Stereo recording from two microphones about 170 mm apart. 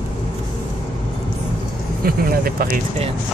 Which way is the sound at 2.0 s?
60° right (ahead or behind).